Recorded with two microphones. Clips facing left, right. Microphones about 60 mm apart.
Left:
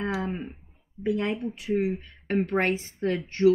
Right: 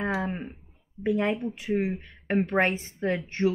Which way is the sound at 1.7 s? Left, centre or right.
Right.